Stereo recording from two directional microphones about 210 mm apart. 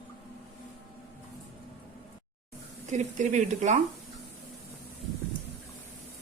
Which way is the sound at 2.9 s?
35° right (ahead or behind).